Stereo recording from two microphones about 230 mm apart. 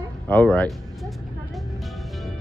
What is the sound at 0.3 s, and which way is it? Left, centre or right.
Speech, centre.